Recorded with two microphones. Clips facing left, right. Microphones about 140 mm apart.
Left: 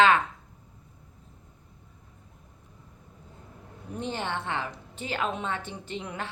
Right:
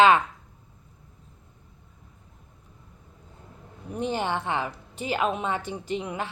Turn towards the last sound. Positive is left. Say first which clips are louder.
# right 5 dB
turn(degrees=-10)  # may be behind; listen again after turning